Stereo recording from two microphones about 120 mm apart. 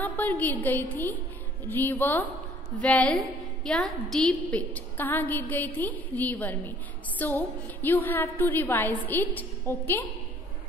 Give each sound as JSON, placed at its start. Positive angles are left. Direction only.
{"t": 0.0, "sound": "a woman's voice", "side_deg": 15}